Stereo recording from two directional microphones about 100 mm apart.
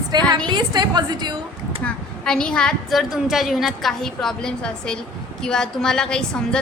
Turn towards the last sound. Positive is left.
turn(degrees=10)  # may be behind; listen again after turning